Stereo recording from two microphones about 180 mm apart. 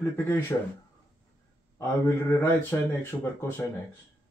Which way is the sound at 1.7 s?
15° left (ahead or behind).